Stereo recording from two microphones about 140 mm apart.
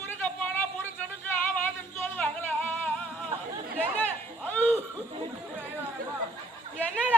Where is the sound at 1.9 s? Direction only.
10° left (ahead or behind).